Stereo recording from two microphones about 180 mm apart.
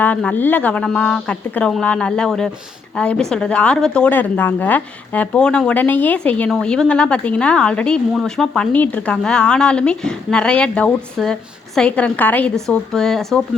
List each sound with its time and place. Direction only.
0.0 s a woman's voice: 10° left (ahead or behind)